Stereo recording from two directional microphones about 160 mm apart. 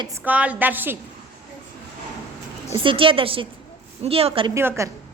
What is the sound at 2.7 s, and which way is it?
A woman's voice, 35° right (ahead or behind).